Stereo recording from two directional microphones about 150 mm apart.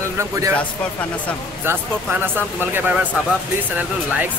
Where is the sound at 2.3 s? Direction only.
15° right (ahead or behind).